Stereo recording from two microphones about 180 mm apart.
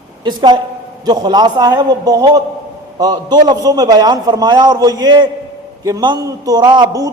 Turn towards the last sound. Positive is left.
turn(degrees=-20)  # may be behind; listen again after turning